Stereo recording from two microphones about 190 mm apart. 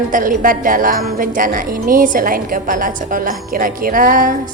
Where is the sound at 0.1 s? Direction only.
45° right (ahead or behind).